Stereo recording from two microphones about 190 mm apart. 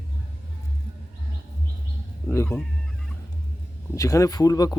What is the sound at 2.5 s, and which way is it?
Speech, 15° left (ahead or behind).